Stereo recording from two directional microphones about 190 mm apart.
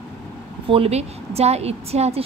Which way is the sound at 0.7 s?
30° right (ahead or behind).